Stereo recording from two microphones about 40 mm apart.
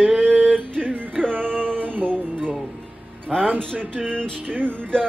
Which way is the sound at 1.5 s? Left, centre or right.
Left.